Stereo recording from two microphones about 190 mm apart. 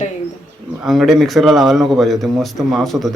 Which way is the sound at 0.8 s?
Centre (ahead or behind).